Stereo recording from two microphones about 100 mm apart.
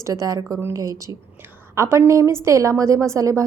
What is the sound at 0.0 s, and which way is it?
A woman's voice, 35° right (ahead or behind).